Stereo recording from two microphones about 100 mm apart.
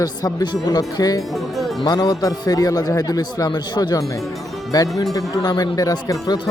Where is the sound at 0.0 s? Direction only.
40° left (ahead or behind).